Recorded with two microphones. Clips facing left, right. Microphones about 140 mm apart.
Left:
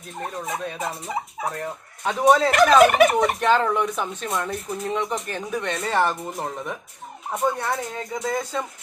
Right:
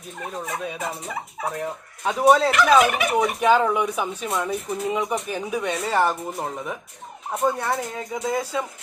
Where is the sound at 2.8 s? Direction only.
45° left (ahead or behind).